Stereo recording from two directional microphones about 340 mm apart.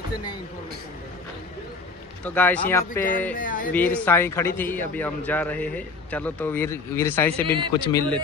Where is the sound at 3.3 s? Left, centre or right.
Left.